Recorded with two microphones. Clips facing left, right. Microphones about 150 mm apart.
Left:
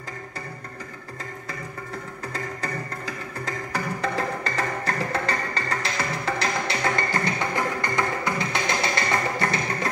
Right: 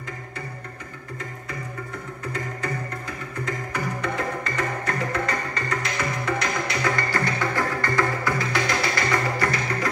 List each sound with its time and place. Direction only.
3.4 s music: 35° left (ahead or behind)